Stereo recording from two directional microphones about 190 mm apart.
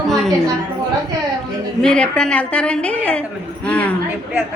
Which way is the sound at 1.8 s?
5° left (ahead or behind).